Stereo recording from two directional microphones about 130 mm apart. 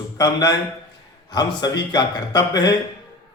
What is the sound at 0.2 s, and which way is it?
A man's voice, 30° left (ahead or behind).